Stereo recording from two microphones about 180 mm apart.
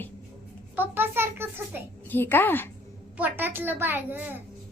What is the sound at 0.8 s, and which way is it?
Speech, 10° right (ahead or behind).